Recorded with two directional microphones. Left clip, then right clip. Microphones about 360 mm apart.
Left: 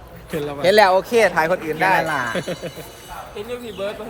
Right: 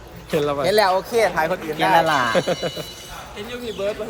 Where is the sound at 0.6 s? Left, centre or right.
Centre.